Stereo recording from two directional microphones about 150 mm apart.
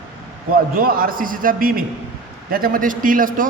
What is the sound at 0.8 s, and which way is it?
A man's voice, 75° right (ahead or behind).